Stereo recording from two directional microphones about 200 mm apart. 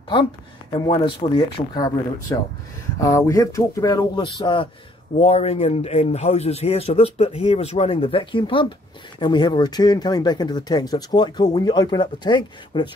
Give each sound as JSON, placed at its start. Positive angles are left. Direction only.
{"t": 0.7, "sound": "speech", "side_deg": 25}